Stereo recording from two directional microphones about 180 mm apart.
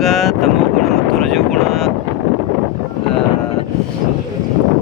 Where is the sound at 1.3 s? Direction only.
Centre (ahead or behind).